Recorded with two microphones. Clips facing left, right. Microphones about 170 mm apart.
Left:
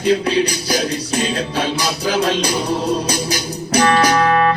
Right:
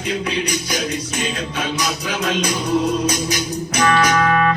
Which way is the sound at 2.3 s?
30° left (ahead or behind).